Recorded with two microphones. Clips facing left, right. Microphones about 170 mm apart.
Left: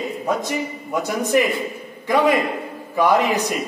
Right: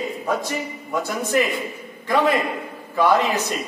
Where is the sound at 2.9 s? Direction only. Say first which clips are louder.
Left 1 dB; 15° left (ahead or behind).